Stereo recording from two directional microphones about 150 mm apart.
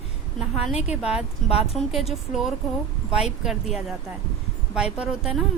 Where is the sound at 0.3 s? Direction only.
5° right (ahead or behind).